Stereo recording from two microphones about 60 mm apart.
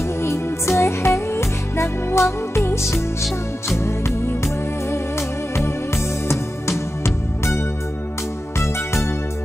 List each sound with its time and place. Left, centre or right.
0.2 s music: left
7.0 s music: left